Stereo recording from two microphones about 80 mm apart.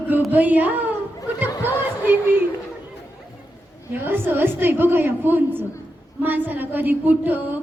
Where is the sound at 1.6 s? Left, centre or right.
Right.